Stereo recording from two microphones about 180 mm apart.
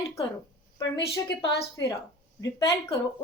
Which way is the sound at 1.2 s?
20° left (ahead or behind).